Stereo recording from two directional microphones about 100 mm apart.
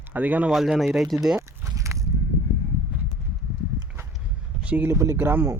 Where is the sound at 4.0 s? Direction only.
25° right (ahead or behind).